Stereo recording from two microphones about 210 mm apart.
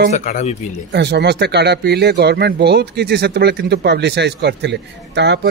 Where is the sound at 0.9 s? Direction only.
50° right (ahead or behind).